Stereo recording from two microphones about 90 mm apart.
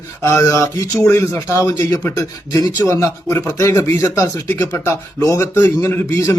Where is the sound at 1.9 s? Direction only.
25° left (ahead or behind).